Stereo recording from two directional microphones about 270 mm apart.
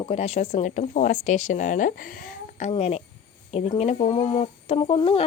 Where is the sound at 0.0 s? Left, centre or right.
Left.